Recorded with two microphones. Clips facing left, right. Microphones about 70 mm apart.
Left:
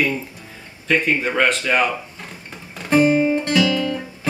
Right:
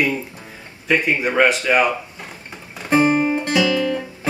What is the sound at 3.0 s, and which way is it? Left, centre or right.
Guitar, centre.